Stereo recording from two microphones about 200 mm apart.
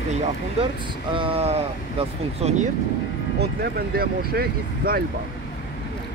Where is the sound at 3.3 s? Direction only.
50° right (ahead or behind).